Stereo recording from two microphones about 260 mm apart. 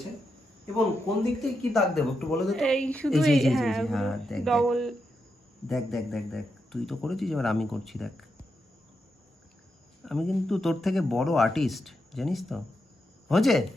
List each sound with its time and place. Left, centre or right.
1.4 s speech: centre
10.0 s speech: centre